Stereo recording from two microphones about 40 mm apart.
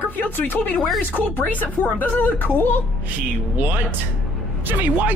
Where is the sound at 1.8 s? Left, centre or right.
Left.